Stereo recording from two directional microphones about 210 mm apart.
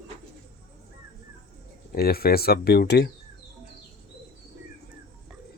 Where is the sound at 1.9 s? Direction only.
45° left (ahead or behind).